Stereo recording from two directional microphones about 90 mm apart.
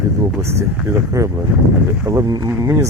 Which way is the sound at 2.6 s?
35° right (ahead or behind).